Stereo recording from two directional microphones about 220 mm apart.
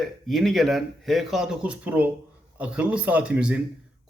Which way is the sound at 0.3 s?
Centre (ahead or behind).